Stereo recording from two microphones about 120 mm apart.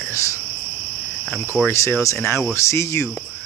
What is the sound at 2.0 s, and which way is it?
Speech, 25° left (ahead or behind).